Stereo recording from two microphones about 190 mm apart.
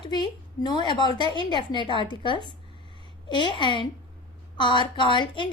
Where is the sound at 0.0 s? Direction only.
25° left (ahead or behind).